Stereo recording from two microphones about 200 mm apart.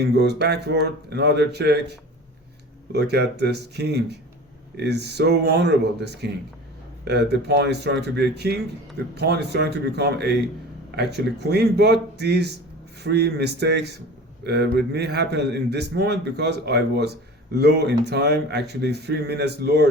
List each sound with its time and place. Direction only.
0.0 s a man's voice: 55° right (ahead or behind)